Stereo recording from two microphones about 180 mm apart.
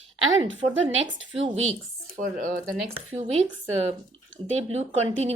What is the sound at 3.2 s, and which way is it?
Speech, 35° right (ahead or behind).